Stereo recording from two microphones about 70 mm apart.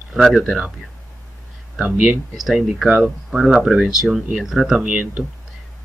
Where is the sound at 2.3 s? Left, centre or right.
Centre.